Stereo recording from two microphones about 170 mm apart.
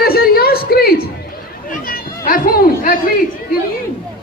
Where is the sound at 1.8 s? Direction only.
55° left (ahead or behind).